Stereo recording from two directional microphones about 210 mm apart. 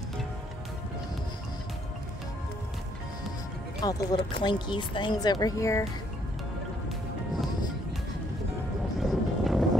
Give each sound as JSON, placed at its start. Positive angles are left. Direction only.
{"t": 3.8, "sound": "speech", "side_deg": 20}
{"t": 9.0, "sound": "music", "side_deg": 0}